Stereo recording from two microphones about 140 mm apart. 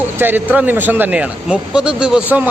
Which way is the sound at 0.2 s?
15° right (ahead or behind).